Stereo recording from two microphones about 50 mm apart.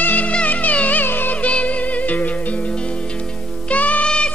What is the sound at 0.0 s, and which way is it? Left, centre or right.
Music, left.